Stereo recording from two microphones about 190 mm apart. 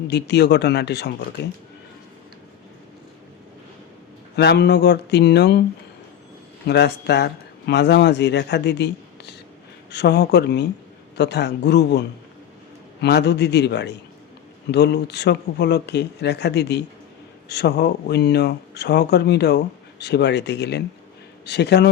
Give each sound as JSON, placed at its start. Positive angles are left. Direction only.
{"t": 0.1, "sound": "speech", "side_deg": 65}
{"t": 4.4, "sound": "speech", "side_deg": 60}
{"t": 6.7, "sound": "speech", "side_deg": 60}